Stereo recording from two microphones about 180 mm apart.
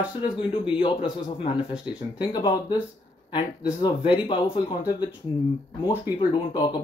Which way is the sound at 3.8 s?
25° left (ahead or behind).